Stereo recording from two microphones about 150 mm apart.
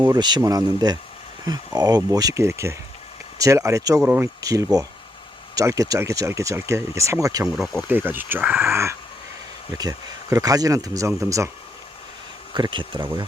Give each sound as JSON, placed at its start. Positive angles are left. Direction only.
{"t": 0.0, "sound": "speech", "side_deg": -30}
{"t": 7.4, "sound": "speech", "side_deg": 0}
{"t": 7.9, "sound": "speech", "side_deg": -15}
{"t": 12.5, "sound": "speech", "side_deg": -30}